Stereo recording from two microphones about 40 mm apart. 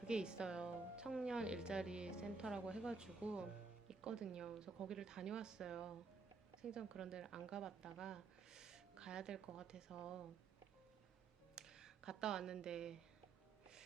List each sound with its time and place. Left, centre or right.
0.1 s a woman's voice: right
11.5 s speech: centre